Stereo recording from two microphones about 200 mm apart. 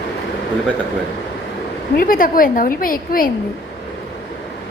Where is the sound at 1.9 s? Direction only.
45° left (ahead or behind).